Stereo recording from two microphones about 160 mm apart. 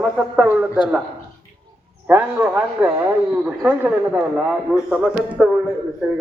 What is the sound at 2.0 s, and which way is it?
A man's voice, 10° right (ahead or behind).